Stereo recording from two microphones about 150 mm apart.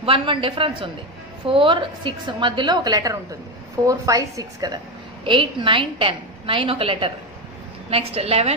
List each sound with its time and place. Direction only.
0.0 s a woman's voice: 35° right (ahead or behind)